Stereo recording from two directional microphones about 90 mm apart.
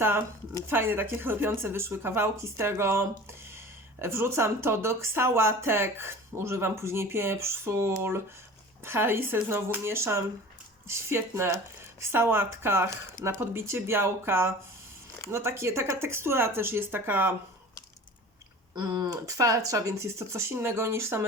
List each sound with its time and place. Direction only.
0.7 s speech: 25° right (ahead or behind)
18.7 s speech: 45° right (ahead or behind); by 21.2 s 30° right (ahead or behind)